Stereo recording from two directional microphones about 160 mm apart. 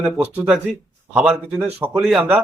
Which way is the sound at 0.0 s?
10° right (ahead or behind).